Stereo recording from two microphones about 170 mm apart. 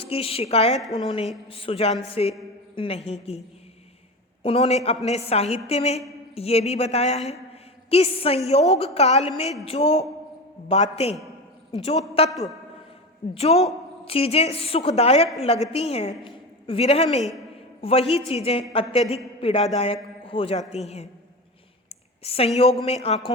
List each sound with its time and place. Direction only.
0.0 s a woman's voice: 35° left (ahead or behind)
4.4 s a woman's voice: 35° left (ahead or behind)
13.3 s a woman's voice: 35° left (ahead or behind)
22.2 s a woman's voice: 35° left (ahead or behind)